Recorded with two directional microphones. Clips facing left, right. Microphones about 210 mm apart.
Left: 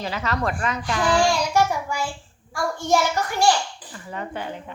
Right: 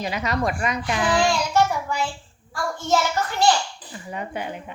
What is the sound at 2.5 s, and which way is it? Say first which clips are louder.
Speech: left 1 dB; 15° left (ahead or behind).